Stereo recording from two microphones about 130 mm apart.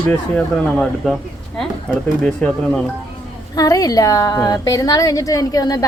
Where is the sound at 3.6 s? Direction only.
25° left (ahead or behind).